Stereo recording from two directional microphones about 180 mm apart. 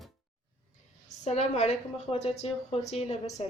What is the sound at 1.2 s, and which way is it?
A woman's voice, 40° left (ahead or behind).